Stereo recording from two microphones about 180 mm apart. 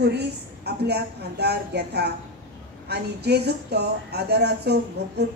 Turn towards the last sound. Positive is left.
turn(degrees=-65)  # may be behind; listen again after turning